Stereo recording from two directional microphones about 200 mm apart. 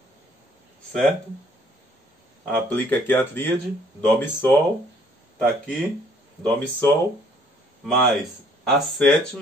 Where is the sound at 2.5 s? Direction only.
10° left (ahead or behind).